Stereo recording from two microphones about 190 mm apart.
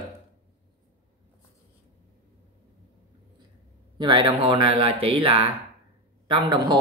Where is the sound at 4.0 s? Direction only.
25° right (ahead or behind).